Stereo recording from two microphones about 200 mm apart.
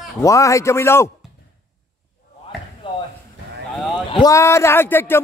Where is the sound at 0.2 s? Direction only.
15° left (ahead or behind).